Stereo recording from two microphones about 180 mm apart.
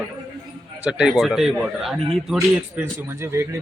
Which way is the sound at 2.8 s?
15° right (ahead or behind).